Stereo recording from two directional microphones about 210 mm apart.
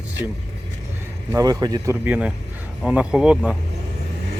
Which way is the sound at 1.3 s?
15° right (ahead or behind).